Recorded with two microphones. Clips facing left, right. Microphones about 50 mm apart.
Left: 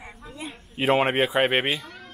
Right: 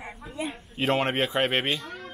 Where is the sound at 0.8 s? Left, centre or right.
Centre.